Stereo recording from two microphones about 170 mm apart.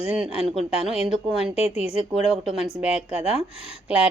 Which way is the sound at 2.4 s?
5° right (ahead or behind).